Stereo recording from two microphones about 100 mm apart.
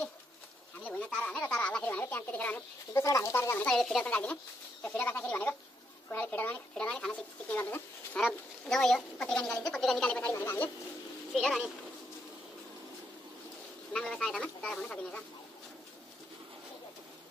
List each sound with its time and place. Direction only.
0.8 s speech: 10° left (ahead or behind)
2.9 s speech: 30° left (ahead or behind)
3.6 s speech: 5° left (ahead or behind)
10.0 s speech: 15° left (ahead or behind)
11.3 s speech: 5° left (ahead or behind)
13.9 s speech: 5° left (ahead or behind)